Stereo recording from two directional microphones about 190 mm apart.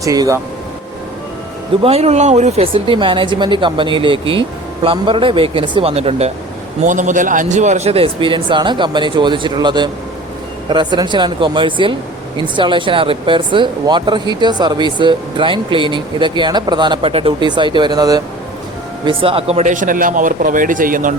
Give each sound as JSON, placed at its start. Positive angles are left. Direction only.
{"t": 0.0, "sound": "speech", "side_deg": -20}
{"t": 1.8, "sound": "speech", "side_deg": -35}